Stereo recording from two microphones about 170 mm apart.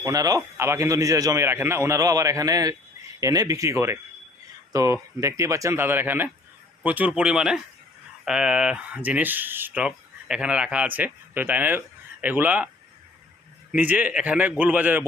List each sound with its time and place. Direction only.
0.0 s a man's voice: 20° right (ahead or behind)